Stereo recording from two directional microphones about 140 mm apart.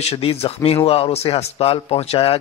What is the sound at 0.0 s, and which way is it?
A man's voice, 45° left (ahead or behind).